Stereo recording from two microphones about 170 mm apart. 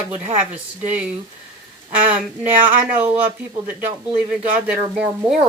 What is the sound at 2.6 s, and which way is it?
Speech, 10° right (ahead or behind).